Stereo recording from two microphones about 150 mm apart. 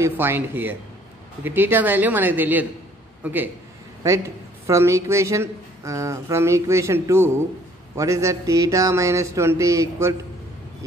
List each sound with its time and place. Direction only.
0.0 s speech: 15° right (ahead or behind)
4.6 s speech: 20° right (ahead or behind)